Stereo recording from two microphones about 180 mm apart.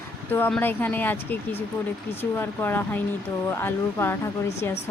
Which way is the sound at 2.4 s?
10° left (ahead or behind).